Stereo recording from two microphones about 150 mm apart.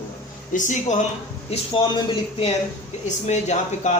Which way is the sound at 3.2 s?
50° left (ahead or behind).